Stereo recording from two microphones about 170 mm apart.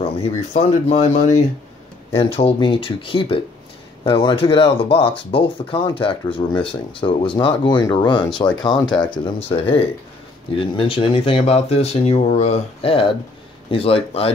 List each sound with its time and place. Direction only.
0.0 s speech: 40° left (ahead or behind)